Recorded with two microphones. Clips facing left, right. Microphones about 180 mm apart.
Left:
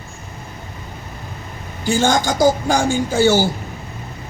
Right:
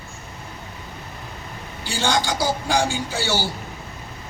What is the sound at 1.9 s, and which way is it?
A woman's voice, 45° left (ahead or behind).